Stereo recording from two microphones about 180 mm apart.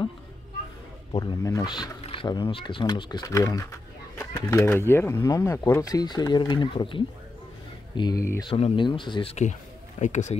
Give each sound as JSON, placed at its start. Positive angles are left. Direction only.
{"t": 1.1, "sound": "speech", "side_deg": 20}
{"t": 8.5, "sound": "speech", "side_deg": 30}